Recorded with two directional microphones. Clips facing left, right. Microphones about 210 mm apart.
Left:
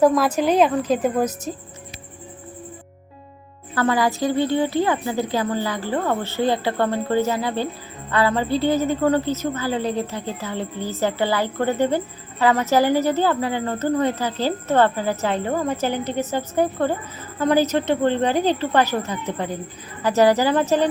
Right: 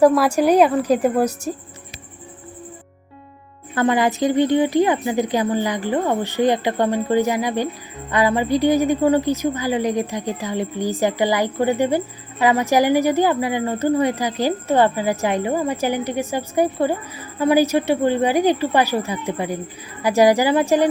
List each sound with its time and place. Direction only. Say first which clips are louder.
0.0 s a woman's voice: right 3 dB; 10° right (ahead or behind)
3.8 s a woman's voice: right 2 dB; 20° right (ahead or behind)